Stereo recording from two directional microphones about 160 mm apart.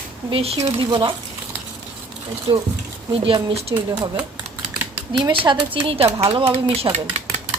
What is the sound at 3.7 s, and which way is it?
Speech, 25° right (ahead or behind).